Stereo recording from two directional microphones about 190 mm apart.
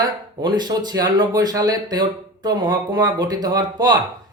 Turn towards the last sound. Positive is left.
turn(degrees=-20)  # may be behind; listen again after turning